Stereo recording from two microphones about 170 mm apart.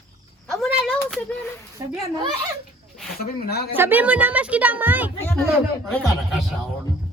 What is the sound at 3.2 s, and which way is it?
Speech, 65° left (ahead or behind).